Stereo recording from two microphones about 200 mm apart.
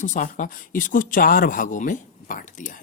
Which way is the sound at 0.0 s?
40° left (ahead or behind).